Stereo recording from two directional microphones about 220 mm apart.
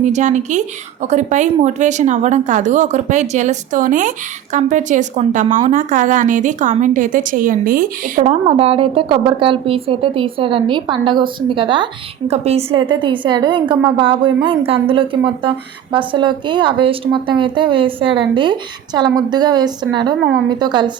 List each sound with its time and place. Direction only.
0.0 s a woman's voice: 35° right (ahead or behind)